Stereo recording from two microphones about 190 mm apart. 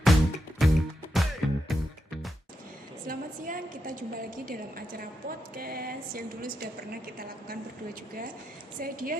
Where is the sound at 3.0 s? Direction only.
45° right (ahead or behind).